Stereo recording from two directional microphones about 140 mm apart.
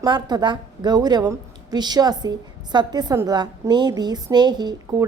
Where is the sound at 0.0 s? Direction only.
30° right (ahead or behind).